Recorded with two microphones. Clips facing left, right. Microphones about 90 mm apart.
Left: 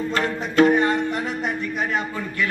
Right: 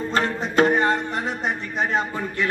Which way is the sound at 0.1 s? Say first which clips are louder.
Right 4 dB; 35° right (ahead or behind).